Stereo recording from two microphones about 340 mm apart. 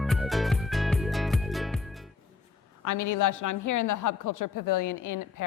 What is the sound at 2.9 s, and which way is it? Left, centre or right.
A woman's voice, left.